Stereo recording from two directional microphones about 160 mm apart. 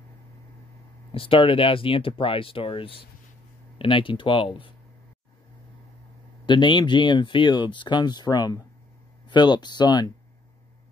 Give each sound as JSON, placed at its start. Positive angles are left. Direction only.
{"t": 1.1, "sound": "speech", "side_deg": 35}
{"t": 6.4, "sound": "speech", "side_deg": 30}